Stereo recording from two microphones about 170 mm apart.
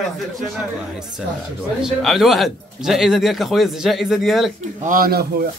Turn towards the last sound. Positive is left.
turn(degrees=-65)  # may be behind; listen again after turning